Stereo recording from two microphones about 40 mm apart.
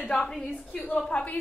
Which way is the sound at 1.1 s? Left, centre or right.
Left.